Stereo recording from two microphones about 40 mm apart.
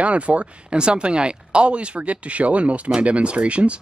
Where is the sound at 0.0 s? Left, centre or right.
Right.